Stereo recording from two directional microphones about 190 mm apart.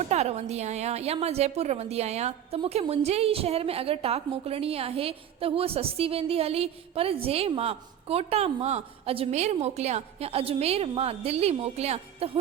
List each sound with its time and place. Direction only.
0.0 s a woman's voice: 35° right (ahead or behind)